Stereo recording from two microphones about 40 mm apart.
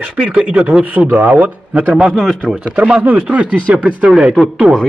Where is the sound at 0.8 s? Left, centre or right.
Right.